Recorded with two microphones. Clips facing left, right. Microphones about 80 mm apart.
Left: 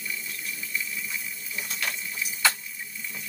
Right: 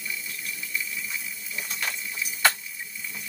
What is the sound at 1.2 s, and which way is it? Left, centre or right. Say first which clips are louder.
Coin: even; centre.